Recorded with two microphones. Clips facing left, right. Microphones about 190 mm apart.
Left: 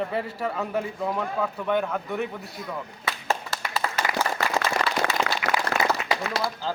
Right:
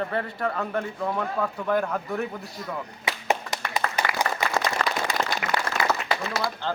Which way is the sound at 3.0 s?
15° right (ahead or behind).